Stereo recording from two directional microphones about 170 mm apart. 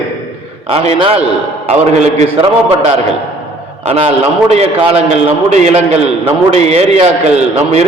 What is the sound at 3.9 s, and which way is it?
A man's voice, 35° right (ahead or behind).